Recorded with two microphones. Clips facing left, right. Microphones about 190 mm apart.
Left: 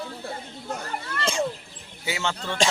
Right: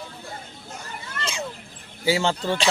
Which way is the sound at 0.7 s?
55° left (ahead or behind).